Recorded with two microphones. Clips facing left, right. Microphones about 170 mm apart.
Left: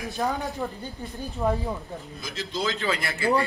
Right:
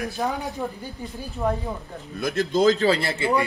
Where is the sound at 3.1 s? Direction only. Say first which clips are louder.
Right 1 dB; 20° right (ahead or behind).